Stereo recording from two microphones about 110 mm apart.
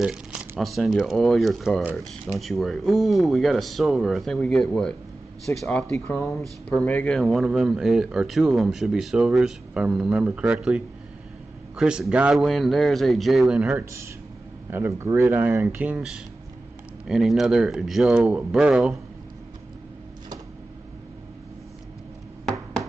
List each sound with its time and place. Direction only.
0.0 s speech: 5° right (ahead or behind); by 7.2 s 15° left (ahead or behind)
7.2 s speech: centre (ahead or behind)
13.6 s speech: 15° right (ahead or behind)